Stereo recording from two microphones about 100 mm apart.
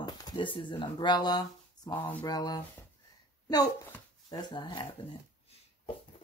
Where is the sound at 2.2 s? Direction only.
40° left (ahead or behind).